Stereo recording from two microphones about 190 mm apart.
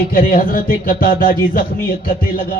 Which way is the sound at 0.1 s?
50° left (ahead or behind).